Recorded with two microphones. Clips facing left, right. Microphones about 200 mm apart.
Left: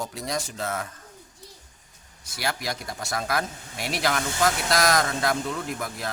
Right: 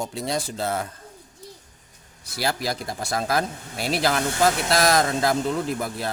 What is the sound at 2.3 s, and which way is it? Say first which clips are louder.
Speech: right 4 dB; 30° right (ahead or behind).